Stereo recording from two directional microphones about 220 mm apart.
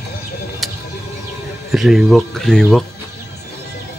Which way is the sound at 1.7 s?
Centre (ahead or behind).